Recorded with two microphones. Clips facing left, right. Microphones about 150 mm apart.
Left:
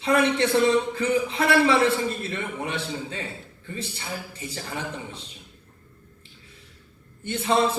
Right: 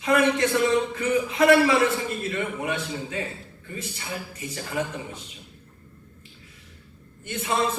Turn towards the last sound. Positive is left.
turn(degrees=30)  # may be behind; listen again after turning